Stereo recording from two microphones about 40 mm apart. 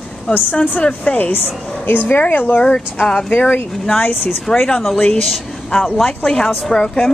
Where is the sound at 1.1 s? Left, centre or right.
Left.